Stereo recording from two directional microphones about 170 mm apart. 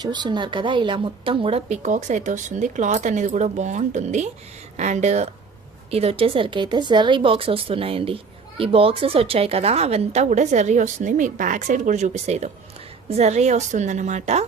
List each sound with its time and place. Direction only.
0.0 s a woman's voice: 25° right (ahead or behind); by 14.4 s 45° right (ahead or behind)